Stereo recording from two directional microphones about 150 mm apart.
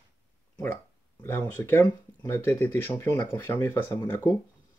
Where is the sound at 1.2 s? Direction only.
15° left (ahead or behind).